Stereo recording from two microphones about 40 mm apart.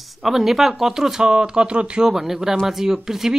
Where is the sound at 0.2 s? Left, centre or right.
Centre.